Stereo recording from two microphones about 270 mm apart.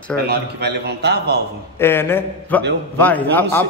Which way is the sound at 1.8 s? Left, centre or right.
Centre.